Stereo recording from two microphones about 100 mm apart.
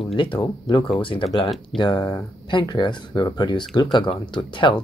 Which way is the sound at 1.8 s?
45° left (ahead or behind).